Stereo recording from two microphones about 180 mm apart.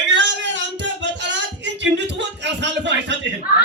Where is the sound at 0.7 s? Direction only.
80° right.